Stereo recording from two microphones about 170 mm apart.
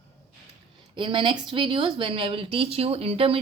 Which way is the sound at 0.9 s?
30° right (ahead or behind).